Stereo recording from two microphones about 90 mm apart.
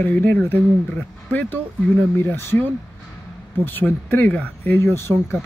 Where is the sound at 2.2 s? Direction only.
25° left (ahead or behind).